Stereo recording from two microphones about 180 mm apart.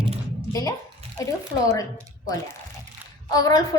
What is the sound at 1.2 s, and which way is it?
Speech, 20° left (ahead or behind).